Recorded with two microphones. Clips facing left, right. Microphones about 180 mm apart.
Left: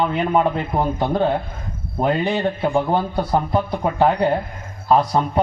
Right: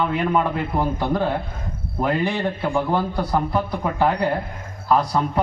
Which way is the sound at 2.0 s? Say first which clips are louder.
Left 2 dB; 20° left (ahead or behind).